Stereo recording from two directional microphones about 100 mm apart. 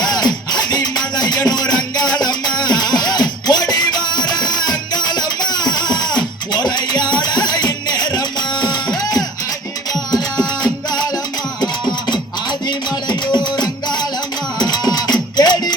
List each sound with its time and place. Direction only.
0.0 s music: 45° left (ahead or behind)
11.6 s music: 45° left (ahead or behind)